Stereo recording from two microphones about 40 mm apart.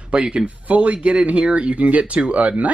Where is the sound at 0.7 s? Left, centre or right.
Right.